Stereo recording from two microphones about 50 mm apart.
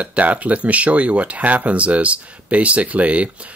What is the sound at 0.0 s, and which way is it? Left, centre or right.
Speech, right.